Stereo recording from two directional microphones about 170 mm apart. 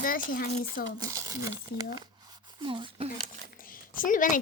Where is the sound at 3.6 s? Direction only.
55° left (ahead or behind).